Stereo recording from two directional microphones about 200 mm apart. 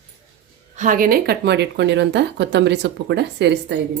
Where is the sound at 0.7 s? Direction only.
40° right (ahead or behind); by 3.7 s 60° right (ahead or behind).